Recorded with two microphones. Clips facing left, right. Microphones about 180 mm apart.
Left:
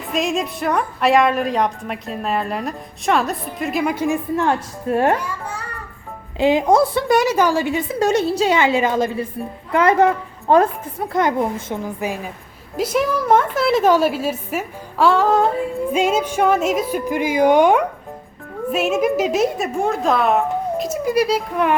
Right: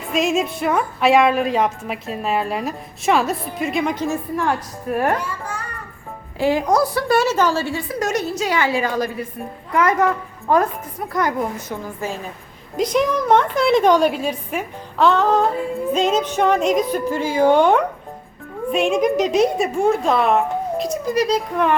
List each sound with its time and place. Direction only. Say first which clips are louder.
0.1 s a woman's voice: right 2 dB; centre (ahead or behind); by 5.1 s 25° left (ahead or behind)
6.4 s a woman's voice: left 3 dB; 20° left (ahead or behind)
11.9 s a woman's voice: left 2 dB; 15° left (ahead or behind)